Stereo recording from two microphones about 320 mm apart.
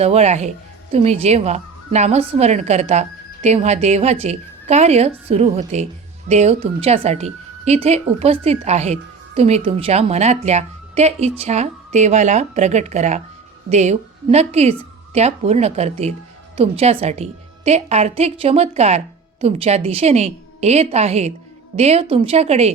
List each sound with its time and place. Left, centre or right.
0.0 s speech: centre